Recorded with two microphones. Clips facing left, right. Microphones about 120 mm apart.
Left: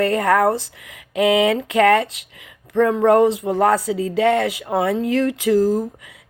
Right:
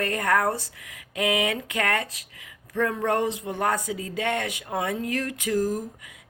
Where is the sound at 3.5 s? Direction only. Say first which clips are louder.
Left 8 dB; 30° left (ahead or behind).